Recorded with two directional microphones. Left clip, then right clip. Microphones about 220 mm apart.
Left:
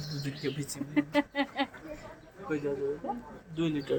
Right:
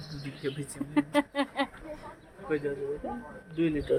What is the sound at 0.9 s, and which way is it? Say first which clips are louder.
Speech: right 1 dB; 20° right (ahead or behind).